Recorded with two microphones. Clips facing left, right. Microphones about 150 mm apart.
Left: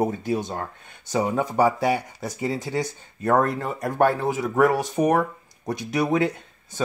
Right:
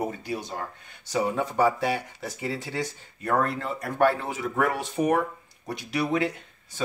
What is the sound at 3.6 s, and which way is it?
Speech, 45° left (ahead or behind).